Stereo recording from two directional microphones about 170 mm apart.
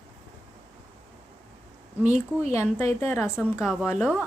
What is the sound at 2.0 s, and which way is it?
Speech, 10° right (ahead or behind).